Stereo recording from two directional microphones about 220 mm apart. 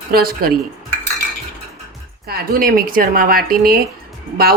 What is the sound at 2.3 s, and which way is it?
A woman's voice, 40° right (ahead or behind).